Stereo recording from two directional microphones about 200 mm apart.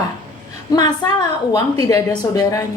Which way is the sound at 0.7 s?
20° left (ahead or behind).